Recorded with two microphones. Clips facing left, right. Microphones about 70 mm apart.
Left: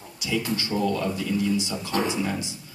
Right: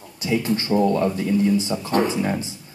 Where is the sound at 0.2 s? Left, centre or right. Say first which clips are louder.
Right 5 dB; right.